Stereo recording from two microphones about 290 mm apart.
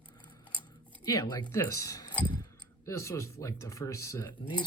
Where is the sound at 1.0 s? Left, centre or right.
Centre.